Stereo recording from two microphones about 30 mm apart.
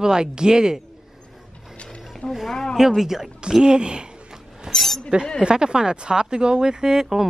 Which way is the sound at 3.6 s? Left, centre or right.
Right.